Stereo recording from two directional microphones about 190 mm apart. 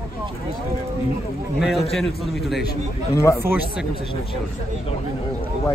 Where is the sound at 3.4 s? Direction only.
10° right (ahead or behind).